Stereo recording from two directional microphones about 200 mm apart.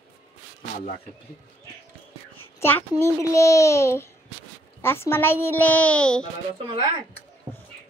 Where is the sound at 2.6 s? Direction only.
10° left (ahead or behind).